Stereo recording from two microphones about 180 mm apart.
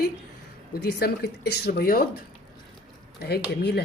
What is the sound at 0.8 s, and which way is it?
Speech, 65° left (ahead or behind).